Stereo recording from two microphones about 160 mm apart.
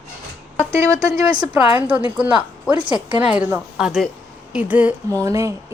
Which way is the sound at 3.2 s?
10° right (ahead or behind).